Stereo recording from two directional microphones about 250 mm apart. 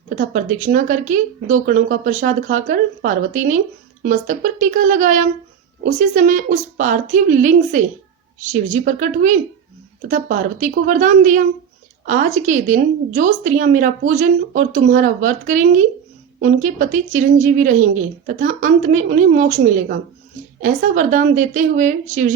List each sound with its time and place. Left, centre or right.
0.3 s a woman's voice: right